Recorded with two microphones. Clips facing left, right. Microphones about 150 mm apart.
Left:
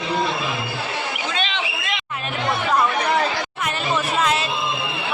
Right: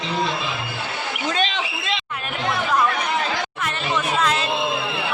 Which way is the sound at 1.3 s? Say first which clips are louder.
Right 2 dB; 40° right (ahead or behind).